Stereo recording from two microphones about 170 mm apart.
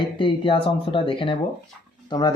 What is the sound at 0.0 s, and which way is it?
Speech, 30° left (ahead or behind).